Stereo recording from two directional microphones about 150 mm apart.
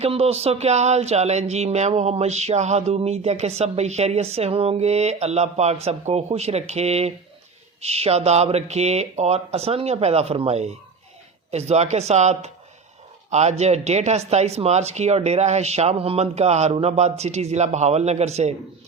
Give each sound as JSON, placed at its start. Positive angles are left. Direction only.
{"t": 0.0, "sound": "speech", "side_deg": -40}